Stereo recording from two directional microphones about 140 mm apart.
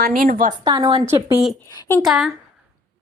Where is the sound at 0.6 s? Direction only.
35° right (ahead or behind).